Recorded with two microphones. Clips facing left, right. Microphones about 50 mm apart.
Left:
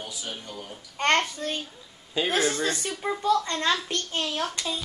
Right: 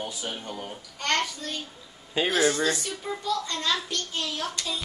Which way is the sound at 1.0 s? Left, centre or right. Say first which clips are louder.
Left 4 dB; left.